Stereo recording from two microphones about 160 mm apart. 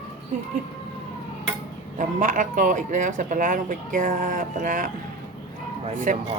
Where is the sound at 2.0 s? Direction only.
55° right (ahead or behind).